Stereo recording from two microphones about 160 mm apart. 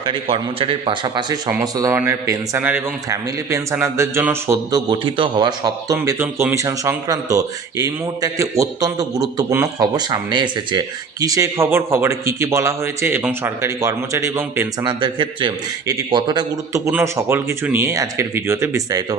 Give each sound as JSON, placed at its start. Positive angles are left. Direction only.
{"t": 0.0, "sound": "a man's voice", "side_deg": -35}
{"t": 14.8, "sound": "a man's voice", "side_deg": -30}